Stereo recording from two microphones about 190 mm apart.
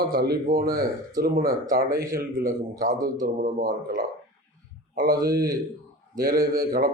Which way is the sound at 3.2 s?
50° right (ahead or behind).